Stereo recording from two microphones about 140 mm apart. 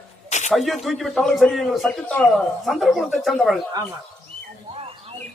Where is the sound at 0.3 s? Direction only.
55° left (ahead or behind).